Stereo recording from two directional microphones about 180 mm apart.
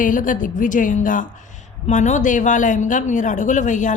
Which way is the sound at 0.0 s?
45° left (ahead or behind).